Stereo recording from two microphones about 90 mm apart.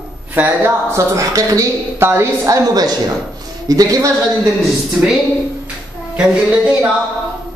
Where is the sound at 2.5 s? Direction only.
45° right (ahead or behind).